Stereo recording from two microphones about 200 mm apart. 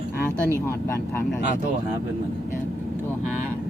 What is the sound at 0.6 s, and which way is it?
Speech, 10° left (ahead or behind).